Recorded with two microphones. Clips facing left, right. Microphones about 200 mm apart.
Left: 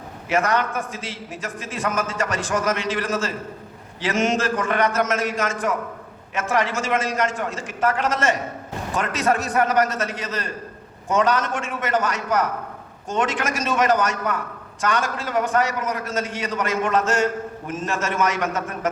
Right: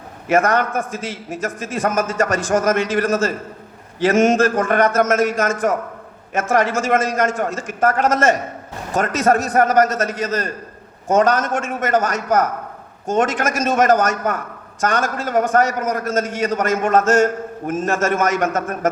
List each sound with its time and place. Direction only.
0.3 s a man's voice: 45° right (ahead or behind)